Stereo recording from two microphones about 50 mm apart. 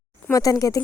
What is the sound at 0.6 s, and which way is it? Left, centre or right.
Speech, left.